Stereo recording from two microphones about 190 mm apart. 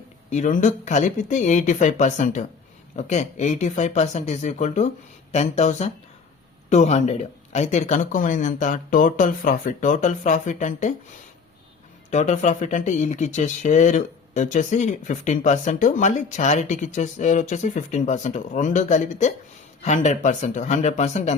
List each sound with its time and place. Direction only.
0.3 s speech: 40° left (ahead or behind)
12.1 s speech: 40° left (ahead or behind)